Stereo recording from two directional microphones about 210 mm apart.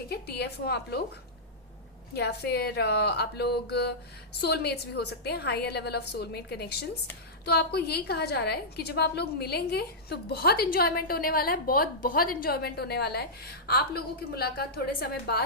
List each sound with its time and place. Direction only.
0.1 s a woman's voice: 50° left (ahead or behind)
2.1 s a woman's voice: 50° left (ahead or behind)